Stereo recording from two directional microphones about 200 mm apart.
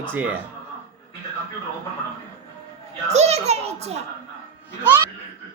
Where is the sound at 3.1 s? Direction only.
35° right (ahead or behind).